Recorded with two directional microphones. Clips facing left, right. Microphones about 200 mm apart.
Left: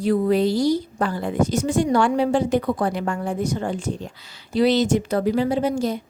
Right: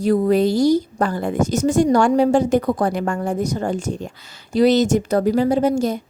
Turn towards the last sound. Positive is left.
turn(degrees=-45)  # may be behind; listen again after turning